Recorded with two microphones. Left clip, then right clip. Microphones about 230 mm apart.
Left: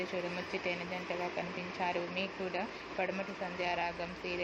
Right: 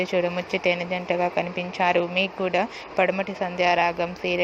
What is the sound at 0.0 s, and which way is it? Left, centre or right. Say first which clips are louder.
Speech: right 14 dB; right.